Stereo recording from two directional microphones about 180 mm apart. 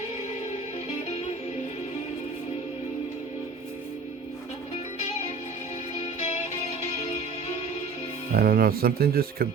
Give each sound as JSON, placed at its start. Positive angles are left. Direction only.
{"t": 8.3, "sound": "speech", "side_deg": -55}